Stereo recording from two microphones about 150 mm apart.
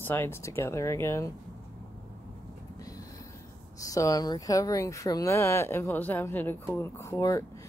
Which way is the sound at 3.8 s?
20° left (ahead or behind).